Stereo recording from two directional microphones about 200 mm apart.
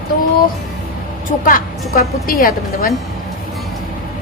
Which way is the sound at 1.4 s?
45° left (ahead or behind).